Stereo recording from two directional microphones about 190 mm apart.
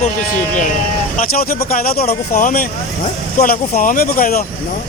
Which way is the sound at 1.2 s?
50° left (ahead or behind).